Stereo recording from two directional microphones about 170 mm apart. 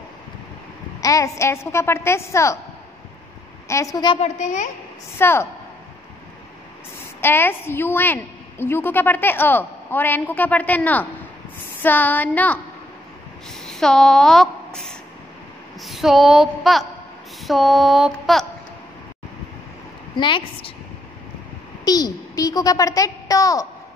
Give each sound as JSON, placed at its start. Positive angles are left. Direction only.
{"t": 1.0, "sound": "a woman's voice", "side_deg": 20}
{"t": 3.6, "sound": "a woman's voice", "side_deg": 15}
{"t": 4.2, "sound": "a woman's voice", "side_deg": 45}
{"t": 5.2, "sound": "a woman's voice", "side_deg": 15}
{"t": 7.2, "sound": "a woman's voice", "side_deg": 10}
{"t": 13.7, "sound": "a woman's voice", "side_deg": 0}
{"t": 15.8, "sound": "a sound", "side_deg": 0}
{"t": 20.2, "sound": "a woman's voice", "side_deg": 30}
{"t": 21.8, "sound": "a child's voice", "side_deg": 20}